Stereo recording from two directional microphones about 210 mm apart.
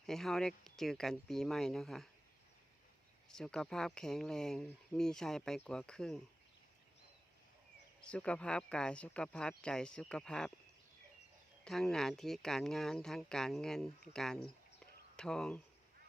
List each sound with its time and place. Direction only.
0.0 s speech: centre (ahead or behind)
3.2 s speech: 5° left (ahead or behind)
8.0 s speech: 5° left (ahead or behind)
11.6 s speech: centre (ahead or behind)